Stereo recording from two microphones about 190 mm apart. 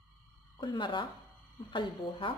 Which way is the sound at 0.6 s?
25° left (ahead or behind).